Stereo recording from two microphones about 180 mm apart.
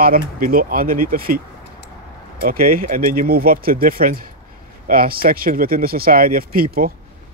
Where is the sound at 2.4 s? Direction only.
55° right (ahead or behind).